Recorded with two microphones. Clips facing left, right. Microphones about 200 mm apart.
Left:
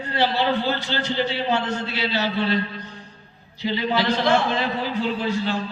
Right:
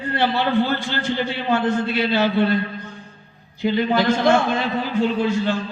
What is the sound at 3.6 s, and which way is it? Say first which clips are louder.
A man's voice: right 4 dB; 50° right (ahead or behind).